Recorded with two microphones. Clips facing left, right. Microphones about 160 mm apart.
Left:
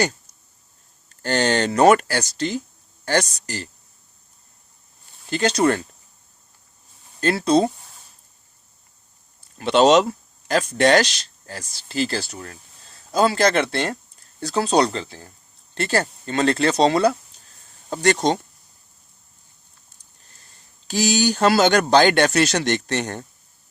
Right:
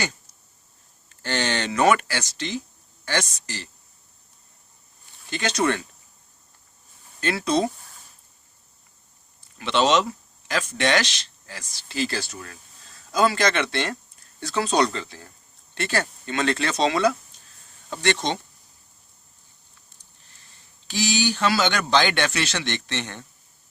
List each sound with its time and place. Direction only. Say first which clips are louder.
1.1 s speech: left 6 dB; 40° left (ahead or behind)
5.3 s speech: left 5 dB; 35° left (ahead or behind)
7.2 s speech: left 5 dB; 35° left (ahead or behind)
9.6 s speech: left 6 dB; 40° left (ahead or behind)
20.9 s speech: left 4 dB; 40° left (ahead or behind)